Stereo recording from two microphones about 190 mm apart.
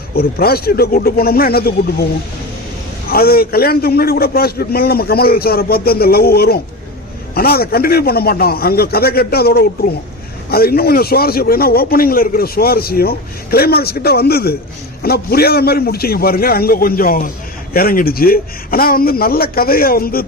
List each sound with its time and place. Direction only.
0.2 s a man's voice: 55° left (ahead or behind)
3.1 s a man's voice: 55° left (ahead or behind)